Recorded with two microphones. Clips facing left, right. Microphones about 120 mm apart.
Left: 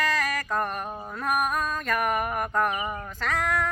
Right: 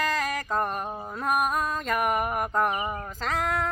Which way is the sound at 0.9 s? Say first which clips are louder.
Even; 20° right (ahead or behind).